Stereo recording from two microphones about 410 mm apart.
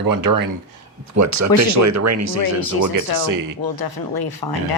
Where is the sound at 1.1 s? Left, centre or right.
Right.